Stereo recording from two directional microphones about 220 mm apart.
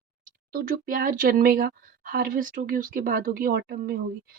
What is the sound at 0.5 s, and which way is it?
Speech, 40° right (ahead or behind).